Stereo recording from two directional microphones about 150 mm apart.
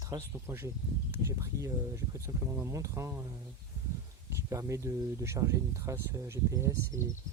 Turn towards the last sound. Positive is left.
turn(degrees=-20)  # may be behind; listen again after turning